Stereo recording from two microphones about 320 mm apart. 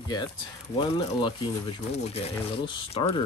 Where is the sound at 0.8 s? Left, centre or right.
Centre.